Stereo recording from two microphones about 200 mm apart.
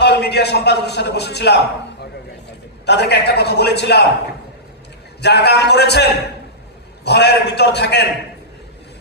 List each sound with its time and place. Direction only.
0.0 s a man's voice: 55° left (ahead or behind)
5.2 s a man's voice: 55° left (ahead or behind)
7.1 s a man's voice: 55° left (ahead or behind)